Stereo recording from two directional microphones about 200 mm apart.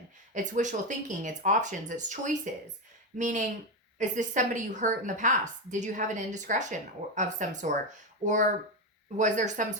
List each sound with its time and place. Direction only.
0.3 s a woman's voice: 40° right (ahead or behind)